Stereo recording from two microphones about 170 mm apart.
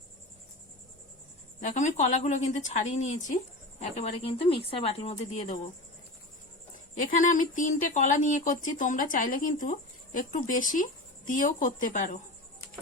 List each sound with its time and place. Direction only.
1.6 s speech: 45° left (ahead or behind)
7.0 s speech: 50° left (ahead or behind)